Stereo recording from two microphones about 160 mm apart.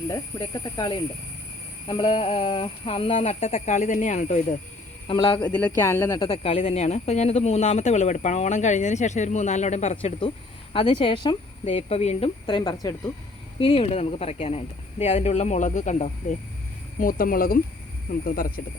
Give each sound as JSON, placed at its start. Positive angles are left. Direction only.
{"t": 0.1, "sound": "speech", "side_deg": 25}
{"t": 3.7, "sound": "speech", "side_deg": 50}
{"t": 5.0, "sound": "speech", "side_deg": 30}
{"t": 5.5, "sound": "speech", "side_deg": 10}
{"t": 6.2, "sound": "speech", "side_deg": 35}
{"t": 13.6, "sound": "speech", "side_deg": 35}
{"t": 17.0, "sound": "speech", "side_deg": 60}